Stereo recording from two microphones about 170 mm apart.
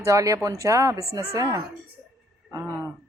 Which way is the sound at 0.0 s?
20° right (ahead or behind).